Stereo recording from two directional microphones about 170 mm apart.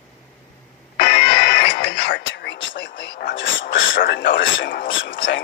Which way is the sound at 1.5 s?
75° left (ahead or behind).